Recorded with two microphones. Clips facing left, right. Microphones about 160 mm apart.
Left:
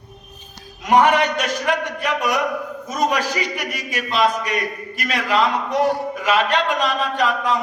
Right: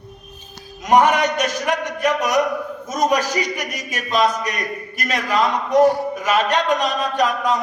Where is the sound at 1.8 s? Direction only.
45° right (ahead or behind).